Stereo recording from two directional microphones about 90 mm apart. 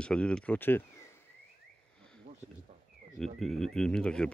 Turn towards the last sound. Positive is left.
turn(degrees=10)  # may be behind; listen again after turning